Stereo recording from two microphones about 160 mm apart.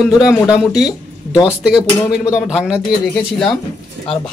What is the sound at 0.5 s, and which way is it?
Speech, centre (ahead or behind).